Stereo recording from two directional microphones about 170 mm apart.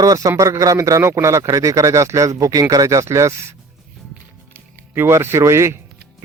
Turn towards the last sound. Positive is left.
turn(degrees=-15)  # may be behind; listen again after turning